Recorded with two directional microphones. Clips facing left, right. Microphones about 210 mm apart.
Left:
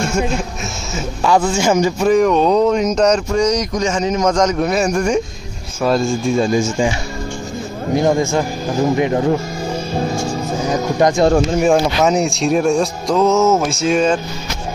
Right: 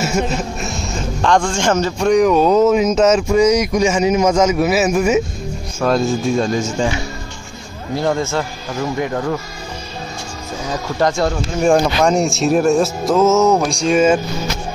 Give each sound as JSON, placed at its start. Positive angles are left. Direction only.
{"t": 0.9, "sound": "speech", "side_deg": 5}
{"t": 7.9, "sound": "a man's voice", "side_deg": 15}
{"t": 11.0, "sound": "a man's voice", "side_deg": 15}
{"t": 11.6, "sound": "speech", "side_deg": 5}